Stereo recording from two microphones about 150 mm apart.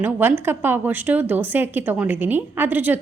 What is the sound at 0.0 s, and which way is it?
A woman's voice, 15° right (ahead or behind).